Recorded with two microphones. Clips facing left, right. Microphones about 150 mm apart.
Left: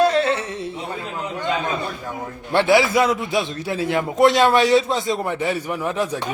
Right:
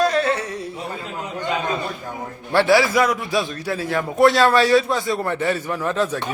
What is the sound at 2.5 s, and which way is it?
A man's voice, 20° left (ahead or behind).